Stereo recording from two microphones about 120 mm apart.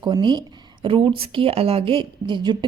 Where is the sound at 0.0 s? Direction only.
40° right (ahead or behind).